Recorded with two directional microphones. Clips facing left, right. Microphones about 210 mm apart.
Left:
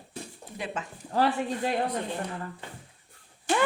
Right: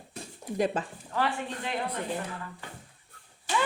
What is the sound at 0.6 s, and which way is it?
Speech, 40° right (ahead or behind).